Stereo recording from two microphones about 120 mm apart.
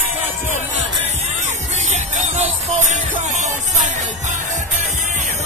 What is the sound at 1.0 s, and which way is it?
Music, 70° right (ahead or behind).